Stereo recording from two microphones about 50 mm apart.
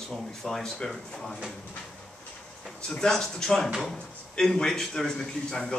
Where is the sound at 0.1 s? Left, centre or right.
Centre.